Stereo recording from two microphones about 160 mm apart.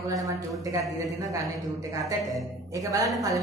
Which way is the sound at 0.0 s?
20° right (ahead or behind).